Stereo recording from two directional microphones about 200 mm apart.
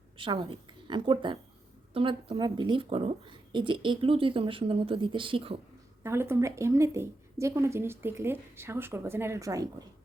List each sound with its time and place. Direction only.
0.2 s a woman's voice: 25° right (ahead or behind)
6.0 s a woman's voice: 10° right (ahead or behind)